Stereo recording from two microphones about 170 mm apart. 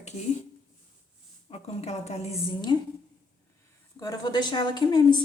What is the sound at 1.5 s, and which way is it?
Speech, 40° left (ahead or behind).